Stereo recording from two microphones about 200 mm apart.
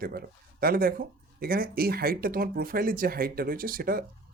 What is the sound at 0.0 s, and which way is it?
Speech, 50° right (ahead or behind).